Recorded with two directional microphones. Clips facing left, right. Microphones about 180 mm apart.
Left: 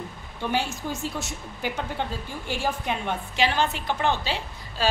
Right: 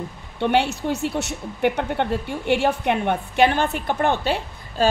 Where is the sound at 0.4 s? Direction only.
70° right (ahead or behind).